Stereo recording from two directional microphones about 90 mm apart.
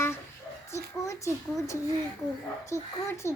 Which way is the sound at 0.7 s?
35° left (ahead or behind).